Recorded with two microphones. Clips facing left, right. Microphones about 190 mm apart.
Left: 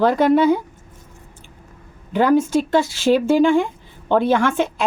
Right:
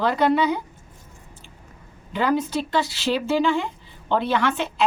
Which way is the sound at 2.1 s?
50° left (ahead or behind).